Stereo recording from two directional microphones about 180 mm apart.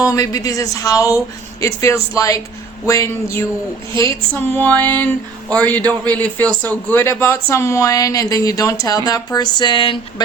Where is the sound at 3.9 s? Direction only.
15° left (ahead or behind).